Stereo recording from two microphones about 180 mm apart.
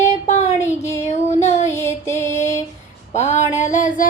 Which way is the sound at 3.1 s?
40° left (ahead or behind).